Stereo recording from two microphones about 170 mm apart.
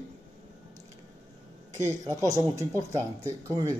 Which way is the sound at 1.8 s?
15° right (ahead or behind).